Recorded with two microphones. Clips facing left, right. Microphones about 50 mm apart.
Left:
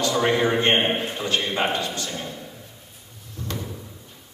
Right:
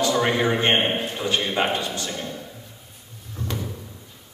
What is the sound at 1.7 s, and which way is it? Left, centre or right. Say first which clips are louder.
Speech: even; centre.